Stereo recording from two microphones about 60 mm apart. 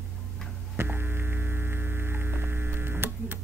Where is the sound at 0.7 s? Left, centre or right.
Right.